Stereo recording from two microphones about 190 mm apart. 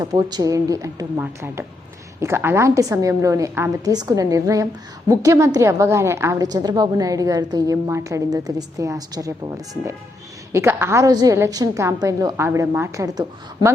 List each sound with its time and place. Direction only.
0.0 s a woman's voice: 20° right (ahead or behind)